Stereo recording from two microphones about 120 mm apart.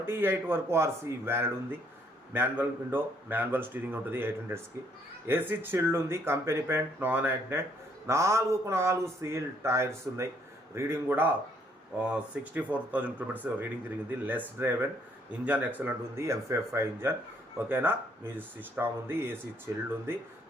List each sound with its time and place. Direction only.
0.0 s speech: 20° right (ahead or behind)